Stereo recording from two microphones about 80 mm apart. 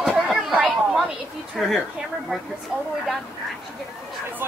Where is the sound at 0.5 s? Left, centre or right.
Centre.